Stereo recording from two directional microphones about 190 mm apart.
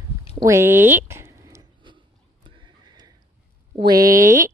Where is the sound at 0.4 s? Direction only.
15° right (ahead or behind).